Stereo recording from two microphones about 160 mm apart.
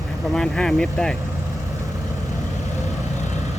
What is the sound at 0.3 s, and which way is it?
Speech, 5° left (ahead or behind).